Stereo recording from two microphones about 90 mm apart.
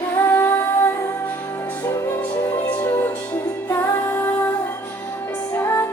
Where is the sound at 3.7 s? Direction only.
25° left (ahead or behind).